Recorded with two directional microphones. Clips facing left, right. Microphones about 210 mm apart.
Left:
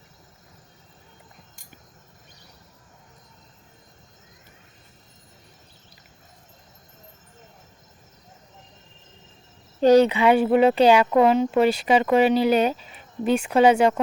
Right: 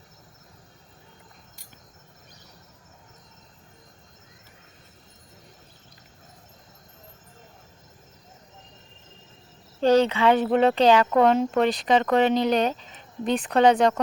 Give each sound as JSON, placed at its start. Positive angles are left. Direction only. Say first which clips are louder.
{"t": 9.8, "sound": "speech", "louder": "left 3 dB", "side_deg": 10}